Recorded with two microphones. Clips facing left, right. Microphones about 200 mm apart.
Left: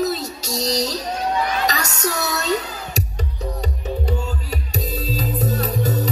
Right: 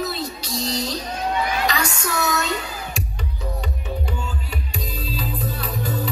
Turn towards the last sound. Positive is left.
turn(degrees=40)  # may be behind; listen again after turning